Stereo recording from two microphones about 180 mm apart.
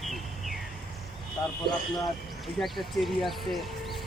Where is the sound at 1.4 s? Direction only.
20° left (ahead or behind).